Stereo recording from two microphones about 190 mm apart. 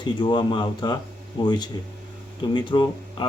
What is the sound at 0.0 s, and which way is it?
Speech, 25° left (ahead or behind).